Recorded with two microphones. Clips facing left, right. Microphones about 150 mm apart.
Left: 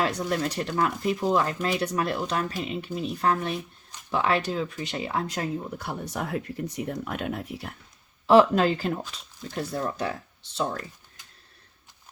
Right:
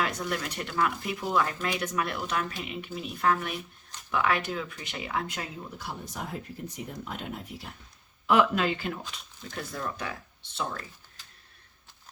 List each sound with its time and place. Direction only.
0.0 s speech: 35° left (ahead or behind)
5.7 s speech: 60° left (ahead or behind)
8.3 s speech: 35° left (ahead or behind)